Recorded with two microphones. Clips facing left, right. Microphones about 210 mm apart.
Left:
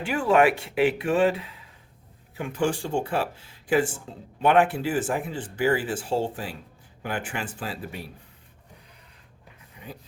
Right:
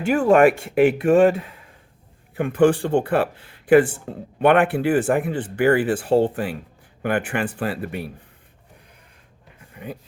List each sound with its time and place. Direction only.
0.0 s speech: 45° right (ahead or behind)
9.7 s pant: 60° right (ahead or behind)